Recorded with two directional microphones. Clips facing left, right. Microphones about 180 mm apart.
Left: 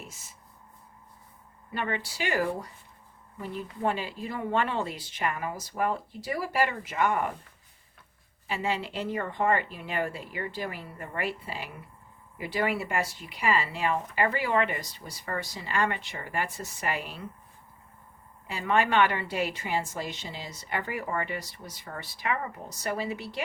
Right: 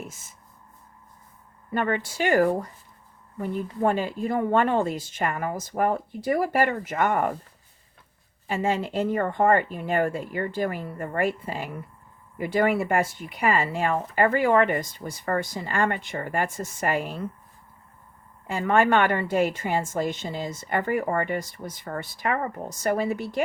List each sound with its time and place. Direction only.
1.7 s a woman's voice: 50° right (ahead or behind)
8.4 s a woman's voice: 45° right (ahead or behind)
18.4 s a woman's voice: 50° right (ahead or behind)